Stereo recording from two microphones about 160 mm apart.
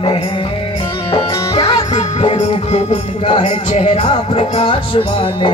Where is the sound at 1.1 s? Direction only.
35° left (ahead or behind).